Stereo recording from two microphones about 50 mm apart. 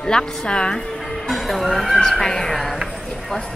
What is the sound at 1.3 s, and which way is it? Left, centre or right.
Speech, centre.